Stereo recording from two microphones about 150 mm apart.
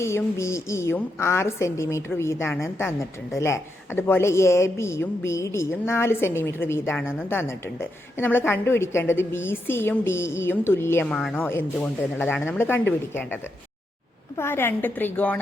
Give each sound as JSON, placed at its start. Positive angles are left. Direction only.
{"t": 0.0, "sound": "a woman's voice", "side_deg": 20}
{"t": 11.0, "sound": "a woman's voice", "side_deg": 5}